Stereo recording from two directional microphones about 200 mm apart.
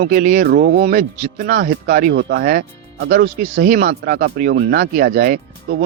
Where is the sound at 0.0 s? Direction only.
45° right (ahead or behind).